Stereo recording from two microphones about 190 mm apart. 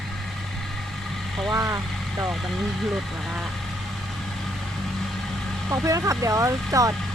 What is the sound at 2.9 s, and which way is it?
Speech, centre (ahead or behind).